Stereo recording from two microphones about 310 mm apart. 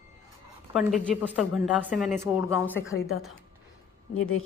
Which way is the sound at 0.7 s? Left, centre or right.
Centre.